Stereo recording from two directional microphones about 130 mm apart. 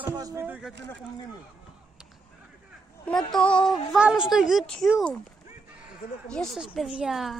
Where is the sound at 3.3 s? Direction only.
5° left (ahead or behind).